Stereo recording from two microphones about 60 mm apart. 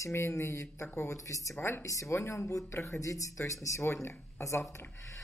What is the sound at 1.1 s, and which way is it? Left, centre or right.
Speech, left.